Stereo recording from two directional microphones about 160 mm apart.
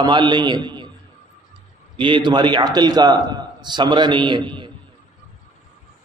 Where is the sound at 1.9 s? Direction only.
30° right (ahead or behind).